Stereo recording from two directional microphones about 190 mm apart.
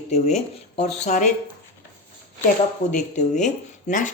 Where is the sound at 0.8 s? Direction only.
40° left (ahead or behind).